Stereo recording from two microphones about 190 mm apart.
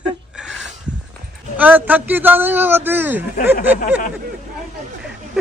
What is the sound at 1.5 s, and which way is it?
A man's voice, 10° right (ahead or behind).